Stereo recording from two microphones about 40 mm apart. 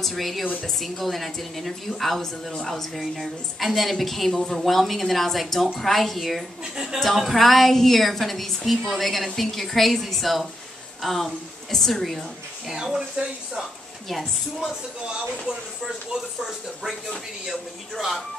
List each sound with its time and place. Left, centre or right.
0.0 s a woman's voice: centre
3.0 s a woman's voice: centre
6.6 s speech: centre
7.3 s a woman's voice: centre
12.8 s speech: centre
16.3 s speech: centre